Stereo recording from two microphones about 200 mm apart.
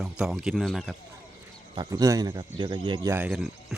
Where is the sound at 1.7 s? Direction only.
15° right (ahead or behind).